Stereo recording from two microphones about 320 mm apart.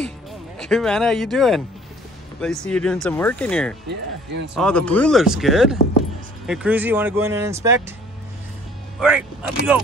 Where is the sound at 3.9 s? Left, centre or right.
Right.